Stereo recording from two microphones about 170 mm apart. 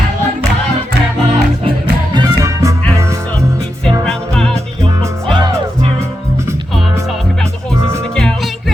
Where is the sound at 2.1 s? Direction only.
20° right (ahead or behind).